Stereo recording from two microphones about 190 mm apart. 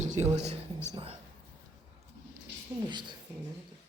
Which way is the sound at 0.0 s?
35° right (ahead or behind).